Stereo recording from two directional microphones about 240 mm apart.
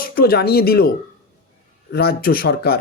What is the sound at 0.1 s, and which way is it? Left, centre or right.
Speech, left.